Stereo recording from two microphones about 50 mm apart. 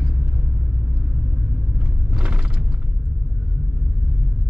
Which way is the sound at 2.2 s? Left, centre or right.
Centre.